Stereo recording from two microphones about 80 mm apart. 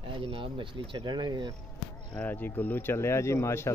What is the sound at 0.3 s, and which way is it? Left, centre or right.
Speech, right.